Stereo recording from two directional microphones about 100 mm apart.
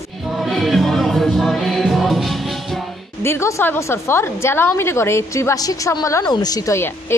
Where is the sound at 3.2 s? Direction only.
25° left (ahead or behind).